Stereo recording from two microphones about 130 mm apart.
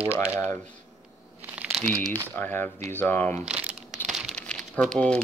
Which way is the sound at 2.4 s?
15° left (ahead or behind).